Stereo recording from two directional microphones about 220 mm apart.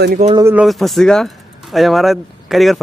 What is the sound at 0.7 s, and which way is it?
Speech, centre (ahead or behind).